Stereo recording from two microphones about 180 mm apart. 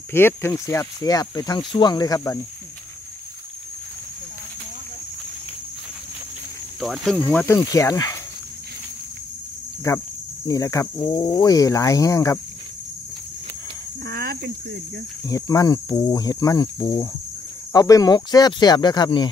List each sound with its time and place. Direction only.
0.1 s speech: 15° left (ahead or behind)
6.8 s speech: centre (ahead or behind); by 8.2 s 20° left (ahead or behind)
9.8 s speech: 15° left (ahead or behind)
14.0 s speech: 60° right (ahead or behind)
15.2 s speech: 20° left (ahead or behind)